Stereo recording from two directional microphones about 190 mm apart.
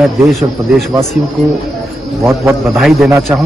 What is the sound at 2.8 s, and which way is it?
Speech, centre (ahead or behind).